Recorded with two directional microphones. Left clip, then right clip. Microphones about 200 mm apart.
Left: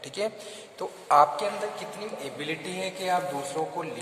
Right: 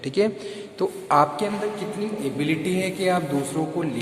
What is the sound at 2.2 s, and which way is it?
Speech, 15° right (ahead or behind).